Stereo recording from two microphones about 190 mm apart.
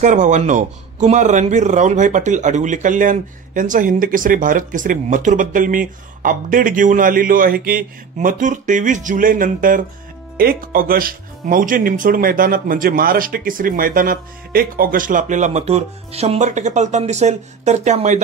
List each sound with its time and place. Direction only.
0.0 s speech: 40° right (ahead or behind)